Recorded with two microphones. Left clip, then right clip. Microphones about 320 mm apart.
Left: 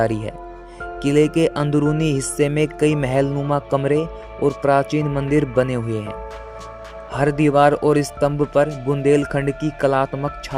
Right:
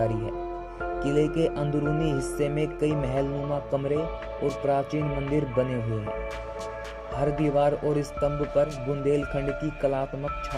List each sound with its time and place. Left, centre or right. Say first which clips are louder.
0.0 s speech: left 6 dB; left
7.2 s speech: left 9 dB; left